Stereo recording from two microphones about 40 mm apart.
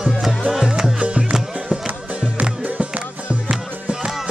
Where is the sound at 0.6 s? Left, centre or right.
Centre.